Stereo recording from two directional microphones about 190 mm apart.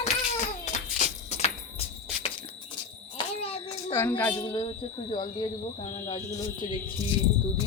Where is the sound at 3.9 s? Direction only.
10° left (ahead or behind).